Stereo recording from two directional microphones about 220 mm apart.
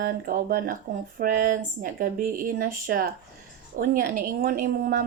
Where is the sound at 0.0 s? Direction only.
40° right (ahead or behind).